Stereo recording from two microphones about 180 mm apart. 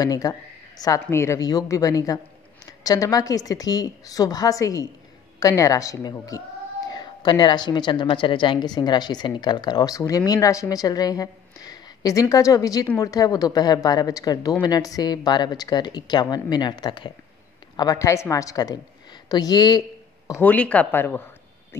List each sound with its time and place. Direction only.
0.0 s speech: 20° left (ahead or behind)
20.2 s speech: 10° left (ahead or behind)